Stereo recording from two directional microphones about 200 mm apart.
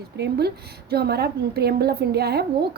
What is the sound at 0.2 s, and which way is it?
A woman's voice, 55° right (ahead or behind).